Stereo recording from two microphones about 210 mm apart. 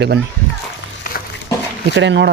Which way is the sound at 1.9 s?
60° right (ahead or behind).